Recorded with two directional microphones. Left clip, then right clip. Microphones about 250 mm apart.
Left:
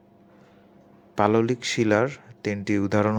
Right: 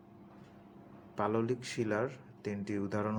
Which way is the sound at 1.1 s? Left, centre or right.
Left.